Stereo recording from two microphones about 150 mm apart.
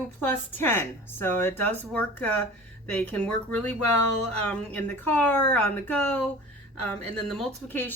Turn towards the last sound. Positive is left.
turn(degrees=10)  # may be behind; listen again after turning